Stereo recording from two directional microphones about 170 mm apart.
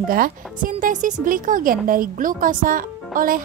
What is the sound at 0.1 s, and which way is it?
Speech, 55° right (ahead or behind).